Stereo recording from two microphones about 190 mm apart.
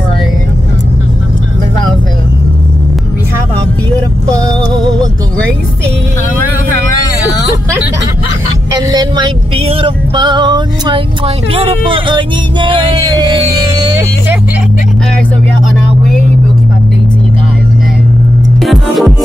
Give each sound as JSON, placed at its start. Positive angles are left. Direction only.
{"t": 4.3, "sound": "music", "side_deg": -20}
{"t": 8.9, "sound": "a sound", "side_deg": -25}
{"t": 18.6, "sound": "music", "side_deg": 0}